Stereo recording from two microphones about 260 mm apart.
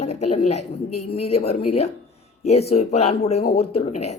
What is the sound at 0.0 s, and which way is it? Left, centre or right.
Speech, left.